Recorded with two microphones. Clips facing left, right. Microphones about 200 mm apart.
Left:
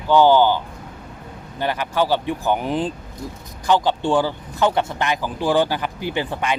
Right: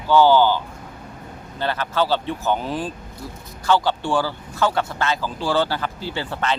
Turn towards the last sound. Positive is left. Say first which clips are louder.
# left 2 dB
turn(degrees=15)  # may be behind; listen again after turning